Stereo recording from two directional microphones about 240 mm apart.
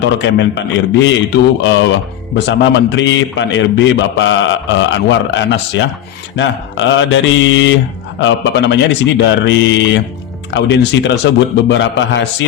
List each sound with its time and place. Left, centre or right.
0.0 s a man's voice: left